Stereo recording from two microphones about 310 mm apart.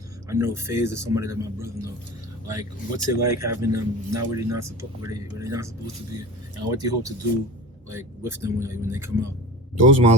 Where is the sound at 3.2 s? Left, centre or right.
Centre.